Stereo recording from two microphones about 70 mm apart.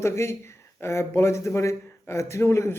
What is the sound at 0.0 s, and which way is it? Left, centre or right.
Speech, left.